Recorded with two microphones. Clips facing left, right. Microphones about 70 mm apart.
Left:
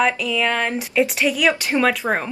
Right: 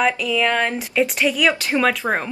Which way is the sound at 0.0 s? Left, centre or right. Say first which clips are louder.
Right 1 dB; centre.